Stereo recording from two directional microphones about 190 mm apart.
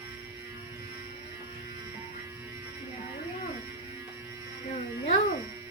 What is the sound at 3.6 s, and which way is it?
Mains hum, 15° right (ahead or behind).